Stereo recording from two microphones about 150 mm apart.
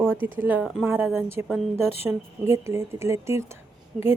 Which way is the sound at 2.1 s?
20° right (ahead or behind).